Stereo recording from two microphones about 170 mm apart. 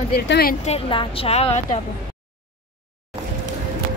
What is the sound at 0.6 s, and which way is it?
A woman's voice, 35° left (ahead or behind).